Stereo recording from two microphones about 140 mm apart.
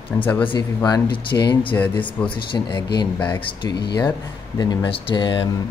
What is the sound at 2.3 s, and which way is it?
Speech, 35° left (ahead or behind).